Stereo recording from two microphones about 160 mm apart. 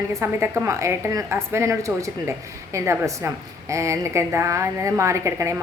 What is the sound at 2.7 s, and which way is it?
A woman's voice, 20° right (ahead or behind).